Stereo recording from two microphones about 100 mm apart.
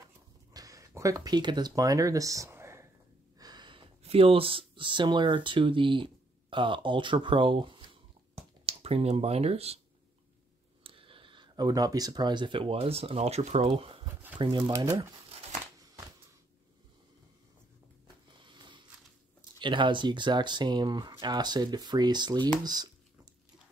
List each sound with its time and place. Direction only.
0.5 s speech: 35° right (ahead or behind)
3.3 s a sound: 45° right (ahead or behind)
4.0 s speech: 75° right (ahead or behind); by 8.0 s 60° right (ahead or behind)
8.6 s speech: 90° right
10.8 s speech: 65° right (ahead or behind)
14.7 s speech: 45° right (ahead or behind)
18.0 s snoring: 50° right (ahead or behind)
19.6 s speech: 55° right (ahead or behind)